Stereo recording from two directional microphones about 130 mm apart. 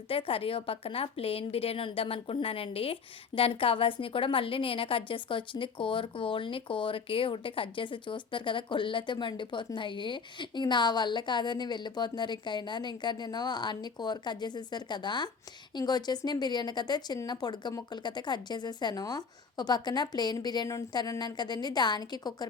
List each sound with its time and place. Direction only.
0.1 s a woman's voice: 45° left (ahead or behind)